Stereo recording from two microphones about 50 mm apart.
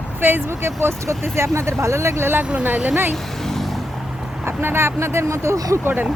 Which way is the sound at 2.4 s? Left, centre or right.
Right.